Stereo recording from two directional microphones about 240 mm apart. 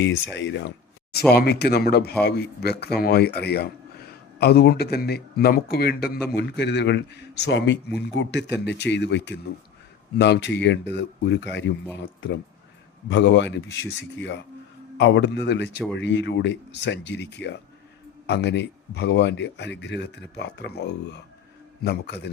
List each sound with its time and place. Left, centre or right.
0.3 s speech: left